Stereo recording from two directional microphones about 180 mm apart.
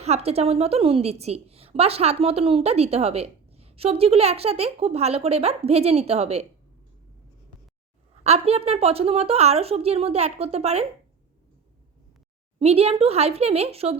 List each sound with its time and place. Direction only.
0.0 s a woman's voice: 35° right (ahead or behind)
8.2 s a woman's voice: 35° right (ahead or behind)
12.5 s a woman's voice: 35° right (ahead or behind)